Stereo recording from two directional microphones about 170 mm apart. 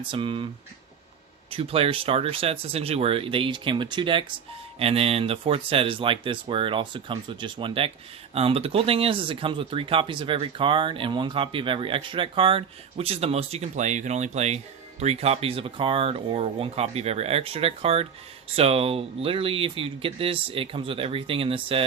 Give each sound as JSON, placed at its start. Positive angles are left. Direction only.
{"t": 0.0, "sound": "speech", "side_deg": -30}
{"t": 1.5, "sound": "speech", "side_deg": -35}